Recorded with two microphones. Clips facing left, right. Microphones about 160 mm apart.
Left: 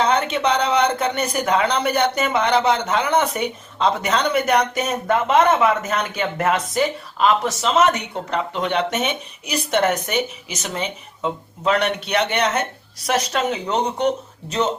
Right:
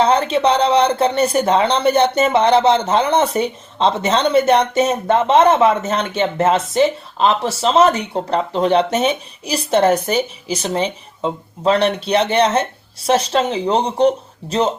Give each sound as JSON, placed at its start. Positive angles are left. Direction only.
{"t": 0.0, "sound": "speech", "side_deg": -30}